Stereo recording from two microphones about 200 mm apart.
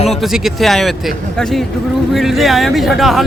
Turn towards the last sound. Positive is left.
turn(degrees=0)  # may be behind; listen again after turning